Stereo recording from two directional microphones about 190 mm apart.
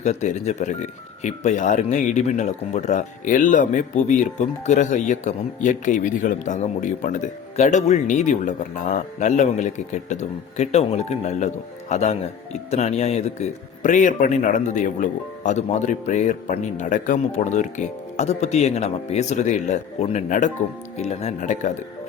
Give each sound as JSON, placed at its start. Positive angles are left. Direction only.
{"t": 0.0, "sound": "speech", "side_deg": 40}